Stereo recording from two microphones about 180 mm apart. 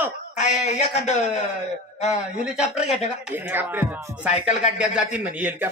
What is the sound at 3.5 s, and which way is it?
Speech, 10° right (ahead or behind).